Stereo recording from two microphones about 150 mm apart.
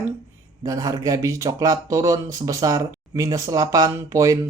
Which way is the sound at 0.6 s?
25° right (ahead or behind).